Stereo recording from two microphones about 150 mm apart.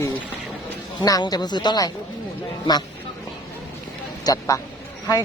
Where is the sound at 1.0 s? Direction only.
25° left (ahead or behind).